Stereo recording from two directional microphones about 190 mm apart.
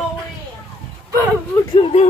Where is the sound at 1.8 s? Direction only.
30° left (ahead or behind).